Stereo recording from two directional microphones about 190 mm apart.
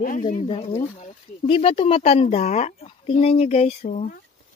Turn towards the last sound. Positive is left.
turn(degrees=40)  # may be behind; listen again after turning